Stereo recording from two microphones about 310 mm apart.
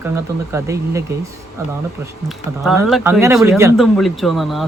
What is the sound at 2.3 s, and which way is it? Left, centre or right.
Speech, centre.